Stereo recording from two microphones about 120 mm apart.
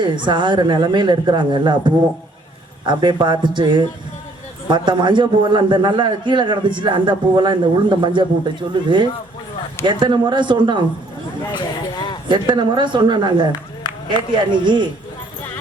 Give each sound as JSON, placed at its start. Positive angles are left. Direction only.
{"t": 0.0, "sound": "a man's voice", "side_deg": -40}
{"t": 11.5, "sound": "a sound", "side_deg": 40}
{"t": 12.3, "sound": "a man's voice", "side_deg": -40}